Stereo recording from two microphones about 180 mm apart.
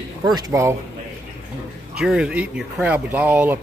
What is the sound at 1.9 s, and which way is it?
Speech, 5° right (ahead or behind).